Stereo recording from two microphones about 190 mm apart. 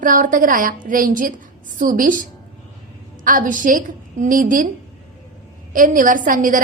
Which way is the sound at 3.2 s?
45° right (ahead or behind).